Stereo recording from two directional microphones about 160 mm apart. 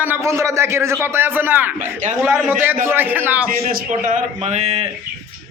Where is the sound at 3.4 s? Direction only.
55° right (ahead or behind).